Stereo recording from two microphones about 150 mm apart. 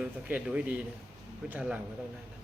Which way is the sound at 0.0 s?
5° right (ahead or behind).